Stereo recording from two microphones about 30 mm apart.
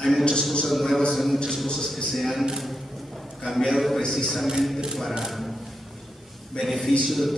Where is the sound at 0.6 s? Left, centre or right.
Centre.